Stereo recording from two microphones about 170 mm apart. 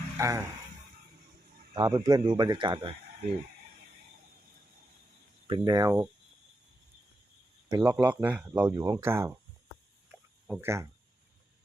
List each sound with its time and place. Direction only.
0.2 s speech: 15° right (ahead or behind)
1.7 s speech: 20° right (ahead or behind)
5.5 s speech: 25° right (ahead or behind)
7.7 s speech: 10° right (ahead or behind)
10.1 s a sound: 5° right (ahead or behind)